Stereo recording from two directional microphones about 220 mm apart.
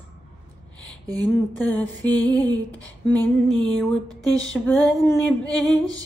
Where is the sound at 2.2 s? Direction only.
20° right (ahead or behind).